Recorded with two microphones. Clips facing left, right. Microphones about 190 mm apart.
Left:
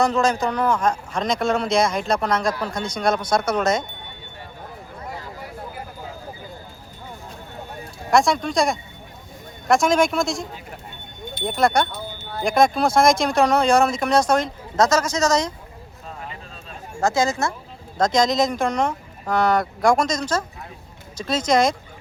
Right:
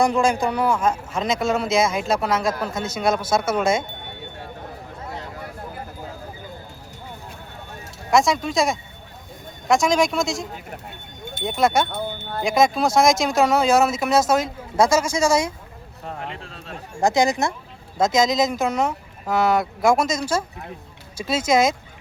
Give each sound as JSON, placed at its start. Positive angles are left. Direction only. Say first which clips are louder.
{"t": 0.0, "sound": "speech", "louder": "right 1 dB", "side_deg": -10}
{"t": 8.1, "sound": "speech", "louder": "even", "side_deg": 0}
{"t": 11.9, "sound": "wind chime", "louder": "right 5 dB", "side_deg": -55}
{"t": 12.4, "sound": "speech", "louder": "left 1 dB", "side_deg": 0}
{"t": 16.0, "sound": "a sound", "louder": "right 4 dB", "side_deg": -70}
{"t": 17.0, "sound": "speech", "louder": "right 2 dB", "side_deg": -15}
{"t": 17.9, "sound": "speech", "louder": "even", "side_deg": -5}